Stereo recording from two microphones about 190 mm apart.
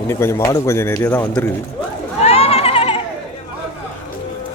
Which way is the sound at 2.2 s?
30° left (ahead or behind).